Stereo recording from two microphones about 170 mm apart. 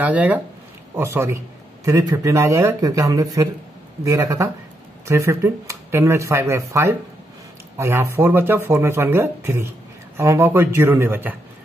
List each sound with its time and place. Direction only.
0.0 s speech: 10° right (ahead or behind)